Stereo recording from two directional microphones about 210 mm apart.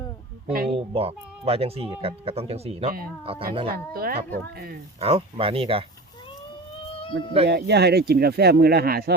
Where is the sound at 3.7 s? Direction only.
45° right (ahead or behind).